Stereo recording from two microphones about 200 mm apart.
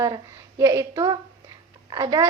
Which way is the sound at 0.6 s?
15° right (ahead or behind).